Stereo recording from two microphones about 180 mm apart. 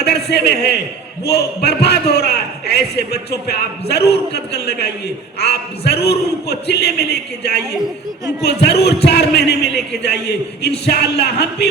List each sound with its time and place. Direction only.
0.0 s a man's voice: 65° left (ahead or behind)